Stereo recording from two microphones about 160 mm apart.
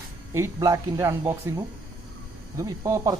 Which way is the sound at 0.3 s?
20° right (ahead or behind).